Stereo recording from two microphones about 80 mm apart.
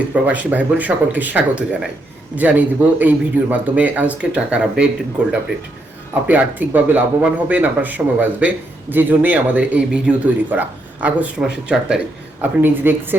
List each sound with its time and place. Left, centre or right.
0.3 s a man's voice: centre
12.4 s a man's voice: right